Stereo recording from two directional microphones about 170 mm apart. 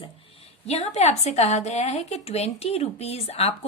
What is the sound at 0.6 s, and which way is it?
A woman's voice, 40° left (ahead or behind).